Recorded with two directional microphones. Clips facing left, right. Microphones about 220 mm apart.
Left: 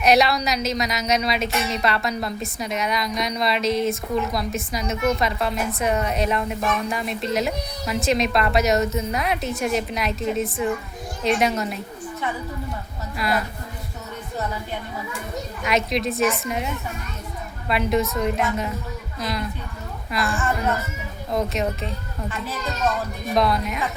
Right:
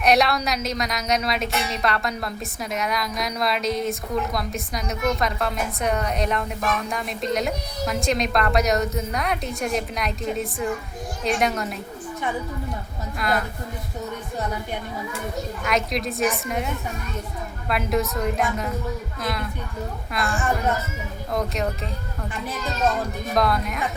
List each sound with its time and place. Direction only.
0.0 s speech: centre (ahead or behind)
13.1 s speech: 5° left (ahead or behind)
15.6 s speech: centre (ahead or behind)
17.7 s speech: centre (ahead or behind)
21.3 s speech: centre (ahead or behind)
23.3 s speech: centre (ahead or behind)